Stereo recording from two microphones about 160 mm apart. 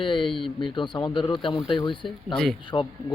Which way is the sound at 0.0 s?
30° left (ahead or behind).